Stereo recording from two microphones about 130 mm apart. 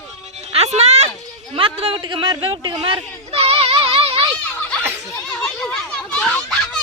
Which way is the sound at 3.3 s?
50° right (ahead or behind).